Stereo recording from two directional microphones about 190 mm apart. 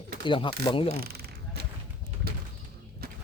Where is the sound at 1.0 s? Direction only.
55° right (ahead or behind).